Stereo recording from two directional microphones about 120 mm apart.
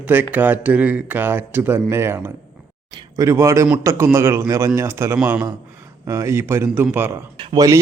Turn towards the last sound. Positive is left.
turn(degrees=-30)  # may be behind; listen again after turning